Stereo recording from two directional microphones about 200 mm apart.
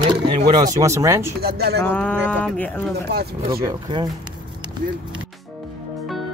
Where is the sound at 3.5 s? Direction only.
20° right (ahead or behind).